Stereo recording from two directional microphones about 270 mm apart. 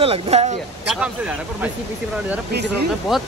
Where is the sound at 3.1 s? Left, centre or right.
Centre.